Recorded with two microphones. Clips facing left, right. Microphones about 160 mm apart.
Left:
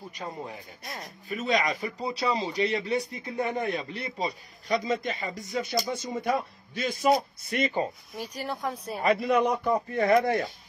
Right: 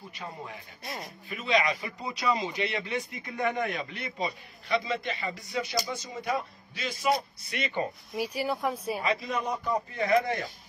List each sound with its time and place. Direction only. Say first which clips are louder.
0.8 s speech: right 2 dB; centre (ahead or behind)
1.3 s speech: left 1 dB; 45° left (ahead or behind)
8.4 s speech: right 1 dB; 5° right (ahead or behind)
9.0 s speech: left 10 dB; 60° left (ahead or behind)